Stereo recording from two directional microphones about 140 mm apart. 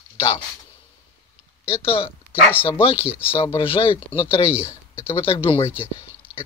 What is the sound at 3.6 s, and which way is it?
Speech, 40° left (ahead or behind).